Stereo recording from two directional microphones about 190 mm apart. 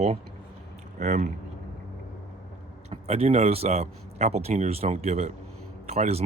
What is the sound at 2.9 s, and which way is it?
Speech, 35° right (ahead or behind).